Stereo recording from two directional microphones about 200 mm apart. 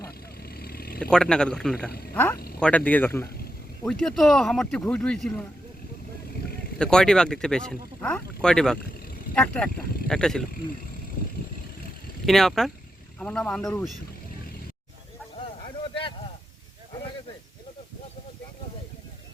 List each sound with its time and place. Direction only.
0.5 s a sound: 50° left (ahead or behind)
1.1 s speech: 5° left (ahead or behind)
6.7 s speech: 5° left (ahead or behind)
12.2 s speech: centre (ahead or behind)